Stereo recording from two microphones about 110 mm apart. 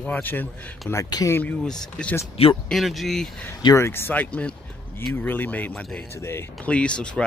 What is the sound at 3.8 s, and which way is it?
Speech, 20° left (ahead or behind).